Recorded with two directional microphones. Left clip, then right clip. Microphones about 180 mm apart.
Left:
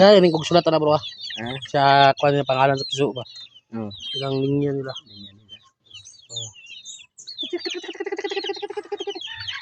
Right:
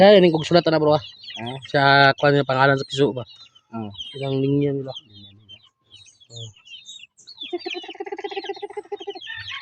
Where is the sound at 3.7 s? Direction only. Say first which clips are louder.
Left 3 dB; 20° right (ahead or behind).